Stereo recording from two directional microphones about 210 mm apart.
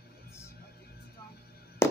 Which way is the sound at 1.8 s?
10° left (ahead or behind).